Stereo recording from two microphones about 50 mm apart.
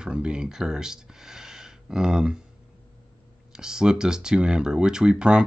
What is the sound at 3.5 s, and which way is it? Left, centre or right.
Speech, centre.